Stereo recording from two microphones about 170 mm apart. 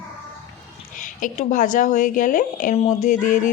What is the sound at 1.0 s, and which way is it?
Speech, 50° left (ahead or behind).